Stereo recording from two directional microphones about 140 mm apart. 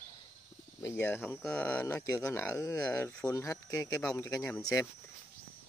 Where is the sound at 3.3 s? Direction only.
25° left (ahead or behind).